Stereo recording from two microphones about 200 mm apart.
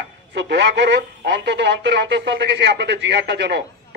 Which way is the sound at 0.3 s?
60° right (ahead or behind).